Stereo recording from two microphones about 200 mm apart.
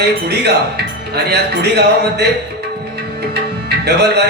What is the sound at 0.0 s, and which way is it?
Speech, 55° right (ahead or behind).